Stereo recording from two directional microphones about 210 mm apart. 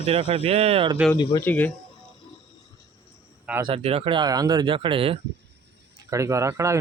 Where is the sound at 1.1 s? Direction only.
20° left (ahead or behind).